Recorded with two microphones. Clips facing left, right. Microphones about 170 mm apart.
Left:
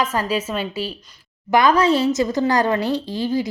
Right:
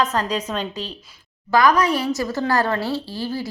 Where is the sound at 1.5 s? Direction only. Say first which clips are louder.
Left 2 dB; 25° left (ahead or behind).